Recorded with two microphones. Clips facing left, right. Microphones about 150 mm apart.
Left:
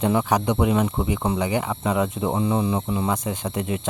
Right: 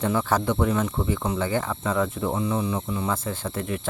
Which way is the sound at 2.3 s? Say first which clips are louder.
Left 5 dB; 30° left (ahead or behind).